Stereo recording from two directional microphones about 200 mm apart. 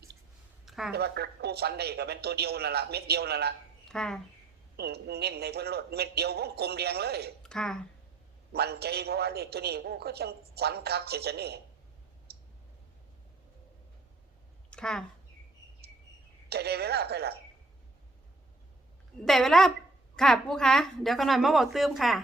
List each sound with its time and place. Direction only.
0.6 s a sound: centre (ahead or behind)
0.9 s a man's voice: 55° right (ahead or behind)
3.8 s speech: 5° left (ahead or behind)
4.8 s a man's voice: 55° right (ahead or behind)
7.4 s speech: 5° left (ahead or behind)
8.5 s a man's voice: 55° right (ahead or behind)
12.3 s clicking: 50° right (ahead or behind)
14.7 s a sound: 5° left (ahead or behind)
16.5 s a man's voice: 55° right (ahead or behind)
19.2 s a woman's voice: centre (ahead or behind)